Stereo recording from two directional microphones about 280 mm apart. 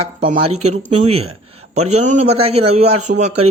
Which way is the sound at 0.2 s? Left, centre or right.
Right.